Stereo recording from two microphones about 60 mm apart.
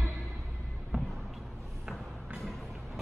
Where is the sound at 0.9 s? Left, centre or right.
Centre.